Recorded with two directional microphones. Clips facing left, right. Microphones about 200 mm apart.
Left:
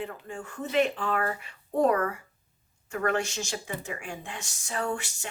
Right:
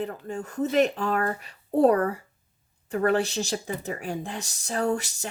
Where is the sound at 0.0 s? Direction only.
40° right (ahead or behind).